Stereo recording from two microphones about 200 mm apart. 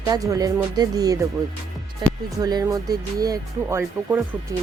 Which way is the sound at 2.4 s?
15° right (ahead or behind).